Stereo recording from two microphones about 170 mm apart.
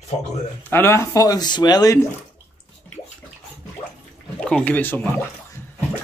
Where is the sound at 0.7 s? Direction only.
15° left (ahead or behind).